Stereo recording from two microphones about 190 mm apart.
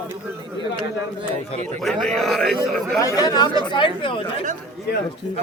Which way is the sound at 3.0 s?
20° left (ahead or behind).